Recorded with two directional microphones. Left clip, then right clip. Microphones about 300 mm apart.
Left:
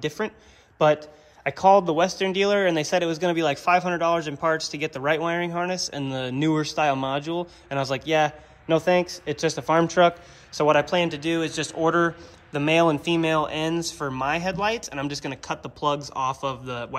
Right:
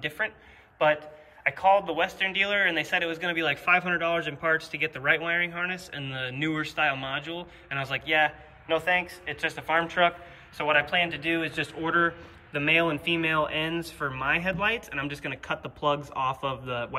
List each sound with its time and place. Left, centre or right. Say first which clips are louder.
1.5 s a man's voice: left 5 dB; left; by 16.9 s centre